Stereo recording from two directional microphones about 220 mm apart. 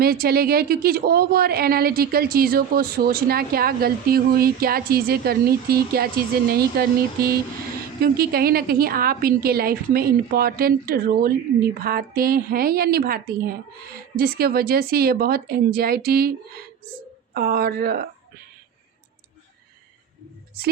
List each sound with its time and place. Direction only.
0.0 s speech: 45° right (ahead or behind)
17.3 s speech: 45° right (ahead or behind)